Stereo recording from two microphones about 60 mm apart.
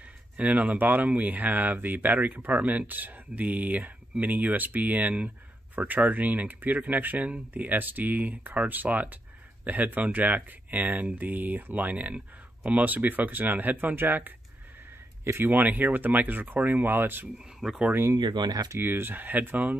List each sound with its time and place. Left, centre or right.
0.4 s speech: right
15.4 s speech: right
17.6 s speech: centre
18.1 s speech: right
18.8 s speech: right